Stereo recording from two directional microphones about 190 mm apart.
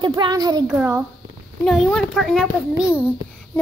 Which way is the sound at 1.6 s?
Centre (ahead or behind).